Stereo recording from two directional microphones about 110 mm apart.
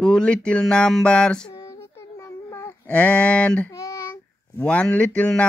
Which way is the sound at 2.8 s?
10° left (ahead or behind).